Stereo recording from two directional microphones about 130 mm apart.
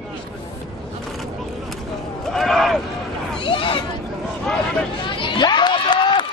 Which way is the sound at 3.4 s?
40° left (ahead or behind).